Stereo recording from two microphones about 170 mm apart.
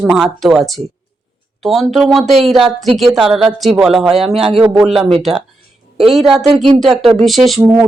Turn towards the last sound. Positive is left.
turn(degrees=0)  # may be behind; listen again after turning